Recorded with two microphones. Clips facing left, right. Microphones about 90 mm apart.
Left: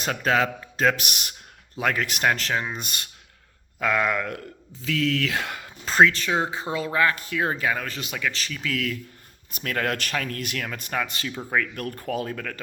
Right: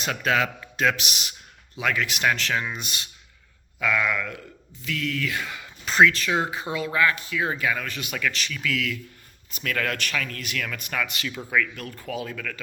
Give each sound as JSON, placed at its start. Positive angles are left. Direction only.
{"t": 0.0, "sound": "a man's voice", "side_deg": 35}
{"t": 5.0, "sound": "speech", "side_deg": 90}
{"t": 5.5, "sound": "speech", "side_deg": 40}
{"t": 11.7, "sound": "speech", "side_deg": 55}